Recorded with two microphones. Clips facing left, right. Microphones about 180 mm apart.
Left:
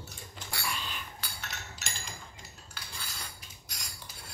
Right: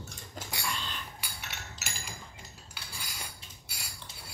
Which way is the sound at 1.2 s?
10° right (ahead or behind).